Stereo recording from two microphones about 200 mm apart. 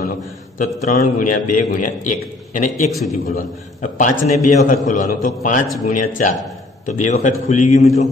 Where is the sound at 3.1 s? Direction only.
40° left (ahead or behind).